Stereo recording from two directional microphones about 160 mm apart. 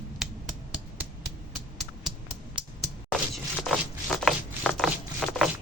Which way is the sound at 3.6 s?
5° left (ahead or behind).